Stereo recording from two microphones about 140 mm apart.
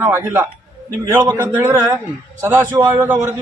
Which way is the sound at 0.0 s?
15° right (ahead or behind).